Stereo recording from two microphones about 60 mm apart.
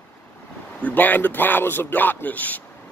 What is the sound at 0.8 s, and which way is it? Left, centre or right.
A man's voice, left.